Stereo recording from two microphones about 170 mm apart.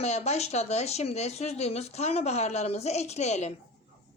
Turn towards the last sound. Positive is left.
turn(degrees=40)  # may be behind; listen again after turning